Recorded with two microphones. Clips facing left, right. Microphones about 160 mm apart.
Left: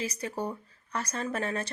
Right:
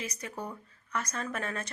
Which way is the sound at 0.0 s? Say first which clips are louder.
Left 5 dB; 30° left (ahead or behind).